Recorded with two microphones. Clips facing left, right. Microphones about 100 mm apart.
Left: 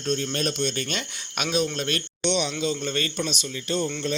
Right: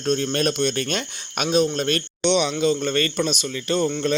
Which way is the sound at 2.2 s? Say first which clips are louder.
Right 6 dB; 70° right (ahead or behind).